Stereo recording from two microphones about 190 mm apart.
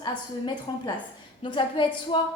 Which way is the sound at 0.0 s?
25° left (ahead or behind).